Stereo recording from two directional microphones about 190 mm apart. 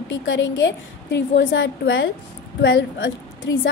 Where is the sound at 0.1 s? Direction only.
75° left (ahead or behind).